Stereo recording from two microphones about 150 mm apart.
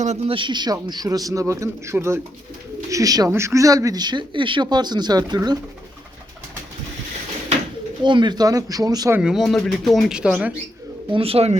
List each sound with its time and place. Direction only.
0.0 s speech: 50° right (ahead or behind)
0.3 s speech: 30° right (ahead or behind)
8.0 s speech: 30° right (ahead or behind)
9.1 s speech: 5° right (ahead or behind)
11.1 s speech: 40° right (ahead or behind)